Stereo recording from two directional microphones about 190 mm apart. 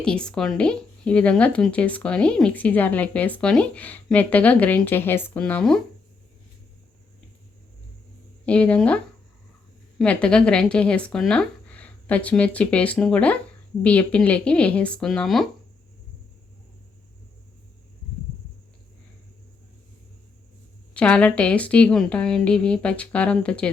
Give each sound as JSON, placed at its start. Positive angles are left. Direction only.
{"t": 0.0, "sound": "speech", "side_deg": 5}
{"t": 8.4, "sound": "speech", "side_deg": 5}
{"t": 10.0, "sound": "speech", "side_deg": 5}
{"t": 20.9, "sound": "speech", "side_deg": 5}